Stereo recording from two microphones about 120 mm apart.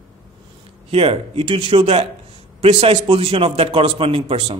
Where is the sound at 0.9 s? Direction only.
50° right (ahead or behind).